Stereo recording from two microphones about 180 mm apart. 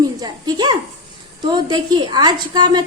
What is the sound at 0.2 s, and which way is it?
A woman's voice, 20° right (ahead or behind).